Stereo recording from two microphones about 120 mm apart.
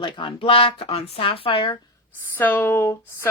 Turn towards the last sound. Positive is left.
turn(degrees=20)  # may be behind; listen again after turning